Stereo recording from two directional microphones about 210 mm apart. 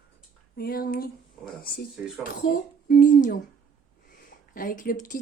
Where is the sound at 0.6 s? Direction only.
45° left (ahead or behind).